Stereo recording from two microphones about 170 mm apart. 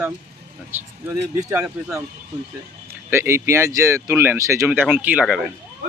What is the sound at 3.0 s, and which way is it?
Speech, 15° right (ahead or behind).